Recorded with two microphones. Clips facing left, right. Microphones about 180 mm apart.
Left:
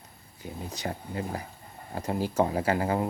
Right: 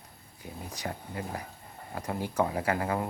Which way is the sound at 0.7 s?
25° left (ahead or behind).